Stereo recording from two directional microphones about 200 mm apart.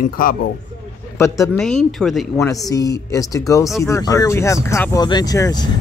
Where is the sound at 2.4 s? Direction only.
15° left (ahead or behind).